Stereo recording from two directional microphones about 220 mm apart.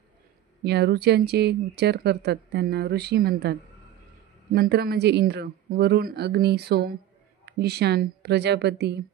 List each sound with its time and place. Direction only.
0.7 s speech: 50° right (ahead or behind)